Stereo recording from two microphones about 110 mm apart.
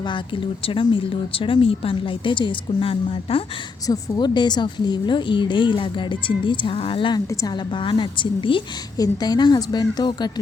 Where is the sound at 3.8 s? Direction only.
40° left (ahead or behind).